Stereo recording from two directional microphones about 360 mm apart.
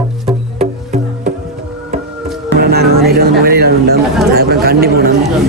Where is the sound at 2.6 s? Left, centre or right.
Right.